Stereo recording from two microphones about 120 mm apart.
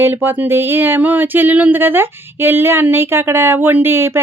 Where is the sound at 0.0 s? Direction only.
15° right (ahead or behind).